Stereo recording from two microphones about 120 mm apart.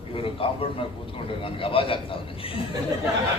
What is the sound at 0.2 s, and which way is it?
A man's voice, 50° left (ahead or behind).